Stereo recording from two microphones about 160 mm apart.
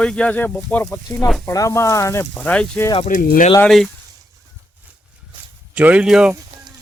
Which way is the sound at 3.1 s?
60° left (ahead or behind).